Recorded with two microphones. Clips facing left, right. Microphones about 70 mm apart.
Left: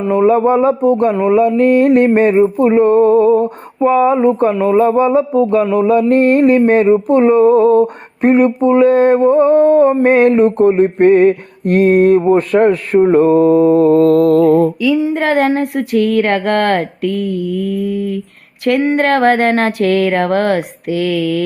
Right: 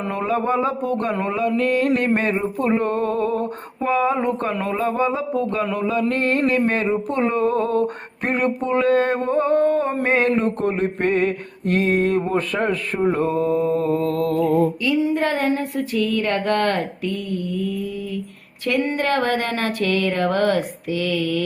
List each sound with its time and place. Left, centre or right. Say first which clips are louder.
0.3 s mantra: left 8 dB; left
0.9 s speech: left 11 dB; centre
1.5 s mantra: left 9 dB; left
3.8 s speech: left 9 dB; centre
4.8 s mantra: left 9 dB; left
10.0 s mantra: left 9 dB; left
14.0 s mantra: left 12 dB; left
14.3 s a sound: left 8 dB; left